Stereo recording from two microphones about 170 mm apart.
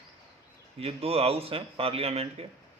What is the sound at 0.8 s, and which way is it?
Speech, 35° right (ahead or behind).